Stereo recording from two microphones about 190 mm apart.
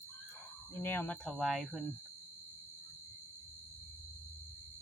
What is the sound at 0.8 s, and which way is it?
Speech, 10° left (ahead or behind).